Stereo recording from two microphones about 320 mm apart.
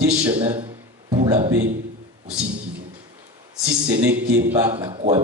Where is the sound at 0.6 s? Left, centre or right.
Centre.